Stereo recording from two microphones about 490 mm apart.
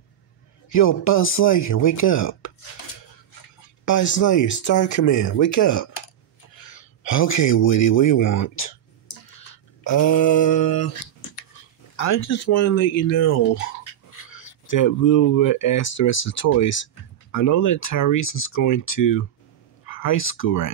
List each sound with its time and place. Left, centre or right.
0.8 s speech: left
4.2 s speech: left
7.0 s speech: left
8.2 s speech: left
9.8 s speech: left
12.0 s speech: left
14.7 s speech: left
15.8 s speech: left
18.6 s speech: left
20.0 s speech: left